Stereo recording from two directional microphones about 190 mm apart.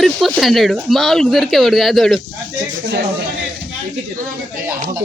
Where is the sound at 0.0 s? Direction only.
Centre (ahead or behind).